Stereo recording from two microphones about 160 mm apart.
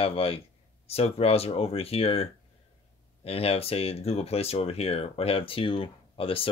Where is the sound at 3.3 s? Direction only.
40° left (ahead or behind).